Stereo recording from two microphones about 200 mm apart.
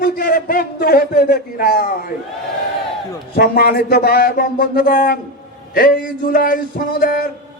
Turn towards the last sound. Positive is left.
turn(degrees=45)  # may be behind; listen again after turning